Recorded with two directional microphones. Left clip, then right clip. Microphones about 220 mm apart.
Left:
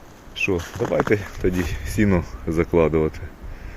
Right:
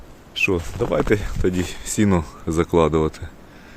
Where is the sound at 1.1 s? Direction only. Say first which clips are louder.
Right 1 dB; 15° right (ahead or behind).